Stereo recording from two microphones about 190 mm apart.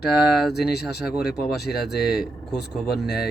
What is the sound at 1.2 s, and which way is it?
Speech, 60° left (ahead or behind).